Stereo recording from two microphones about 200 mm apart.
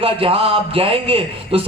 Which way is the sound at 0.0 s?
30° right (ahead or behind).